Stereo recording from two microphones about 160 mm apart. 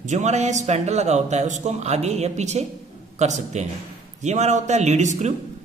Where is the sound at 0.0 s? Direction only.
50° right (ahead or behind).